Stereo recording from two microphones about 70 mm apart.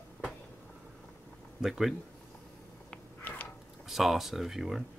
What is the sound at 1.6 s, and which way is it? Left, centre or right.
Speech, centre.